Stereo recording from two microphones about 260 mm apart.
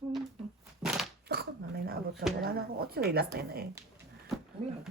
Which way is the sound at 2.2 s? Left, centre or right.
Right.